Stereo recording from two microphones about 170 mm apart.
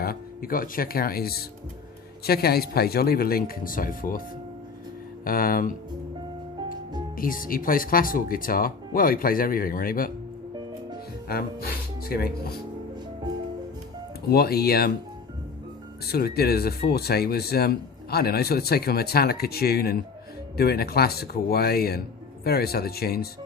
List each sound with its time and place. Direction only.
0.0 s speech: 60° left (ahead or behind)
5.2 s speech: 60° left (ahead or behind)
7.2 s speech: 55° left (ahead or behind)
11.3 s speech: 65° left (ahead or behind)
14.3 s speech: 65° left (ahead or behind)
16.0 s speech: 65° left (ahead or behind)